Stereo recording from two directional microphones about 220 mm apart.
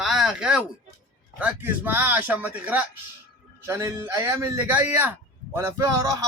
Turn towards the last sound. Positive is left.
turn(degrees=-15)  # may be behind; listen again after turning